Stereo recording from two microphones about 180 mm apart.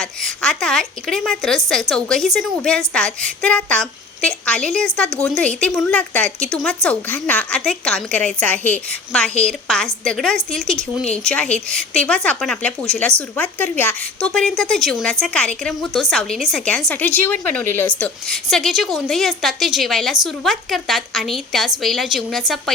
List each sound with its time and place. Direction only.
0.0 s a woman's voice: 5° left (ahead or behind)